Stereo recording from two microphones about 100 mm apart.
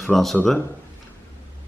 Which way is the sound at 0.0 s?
Centre (ahead or behind).